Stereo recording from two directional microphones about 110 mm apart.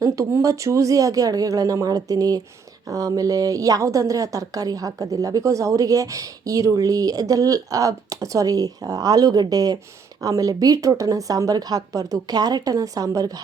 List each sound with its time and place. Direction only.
0.0 s a woman's voice: 30° right (ahead or behind)